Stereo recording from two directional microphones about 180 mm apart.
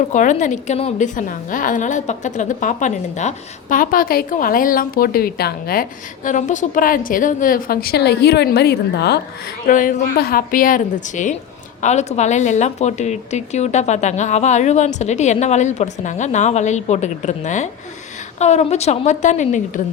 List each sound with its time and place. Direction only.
0.1 s a woman's voice: 45° left (ahead or behind)
6.2 s a woman's voice: 45° left (ahead or behind); by 9.2 s 65° left (ahead or behind)
9.6 s a woman's voice: 50° left (ahead or behind)